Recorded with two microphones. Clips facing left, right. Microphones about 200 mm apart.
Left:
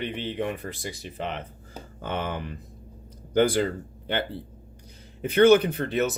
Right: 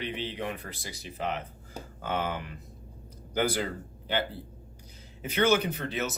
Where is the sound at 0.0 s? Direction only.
50° left (ahead or behind).